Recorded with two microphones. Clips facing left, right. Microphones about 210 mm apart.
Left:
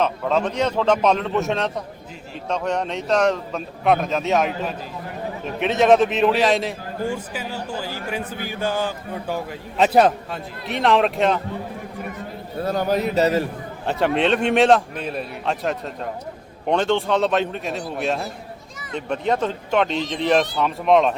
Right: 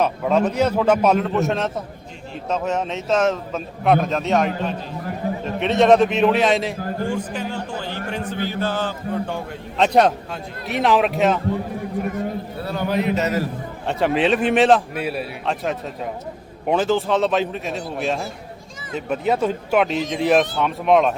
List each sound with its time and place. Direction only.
0.0 s a man's voice: 10° right (ahead or behind)
12.6 s a man's voice: 40° left (ahead or behind)
13.8 s a man's voice: centre (ahead or behind)